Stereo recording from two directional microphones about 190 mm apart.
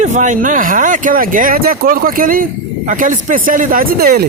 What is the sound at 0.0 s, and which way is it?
Speech, 40° right (ahead or behind).